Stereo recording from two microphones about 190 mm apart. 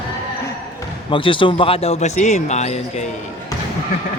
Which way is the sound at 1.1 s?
25° left (ahead or behind).